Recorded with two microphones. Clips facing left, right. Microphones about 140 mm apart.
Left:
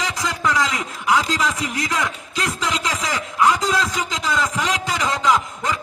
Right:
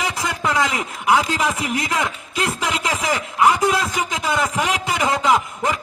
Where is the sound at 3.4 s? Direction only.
15° right (ahead or behind).